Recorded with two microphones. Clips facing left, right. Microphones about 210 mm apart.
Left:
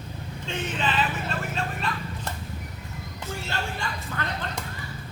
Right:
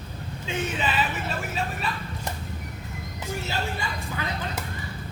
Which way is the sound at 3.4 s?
5° right (ahead or behind).